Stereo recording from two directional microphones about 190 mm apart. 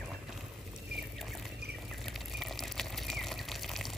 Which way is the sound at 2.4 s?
Centre (ahead or behind).